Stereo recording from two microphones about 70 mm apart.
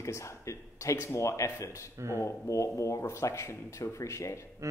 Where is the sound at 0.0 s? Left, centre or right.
Left.